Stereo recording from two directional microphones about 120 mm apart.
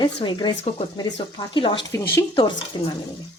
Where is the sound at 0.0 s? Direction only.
40° left (ahead or behind).